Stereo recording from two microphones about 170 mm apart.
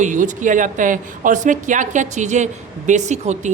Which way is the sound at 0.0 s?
45° right (ahead or behind).